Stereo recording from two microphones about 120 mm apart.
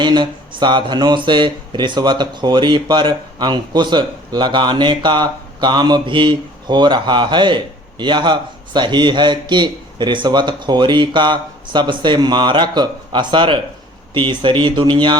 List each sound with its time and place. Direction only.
0.0 s speech: 40° right (ahead or behind)